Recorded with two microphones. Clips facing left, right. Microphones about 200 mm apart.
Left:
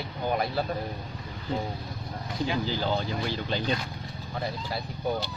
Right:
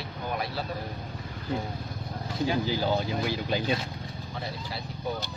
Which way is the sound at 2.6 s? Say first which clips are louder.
Right 1 dB; 10° right (ahead or behind).